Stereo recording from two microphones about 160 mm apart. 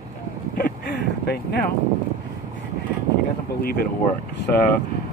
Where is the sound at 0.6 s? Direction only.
80° left.